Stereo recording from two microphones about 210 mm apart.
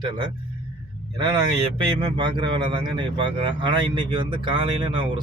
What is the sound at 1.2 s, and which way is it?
Speech, 25° right (ahead or behind).